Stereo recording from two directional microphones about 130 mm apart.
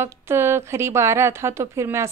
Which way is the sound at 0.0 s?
20° right (ahead or behind).